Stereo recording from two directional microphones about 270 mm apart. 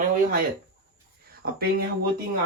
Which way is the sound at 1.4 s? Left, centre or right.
Right.